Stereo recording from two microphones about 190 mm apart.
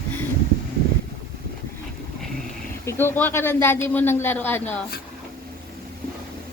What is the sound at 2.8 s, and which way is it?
A woman's voice, 10° left (ahead or behind).